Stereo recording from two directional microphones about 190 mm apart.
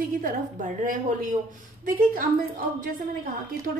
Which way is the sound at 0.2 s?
40° right (ahead or behind).